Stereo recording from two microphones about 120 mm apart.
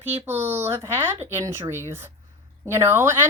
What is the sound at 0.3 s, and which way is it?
Speech, 20° right (ahead or behind).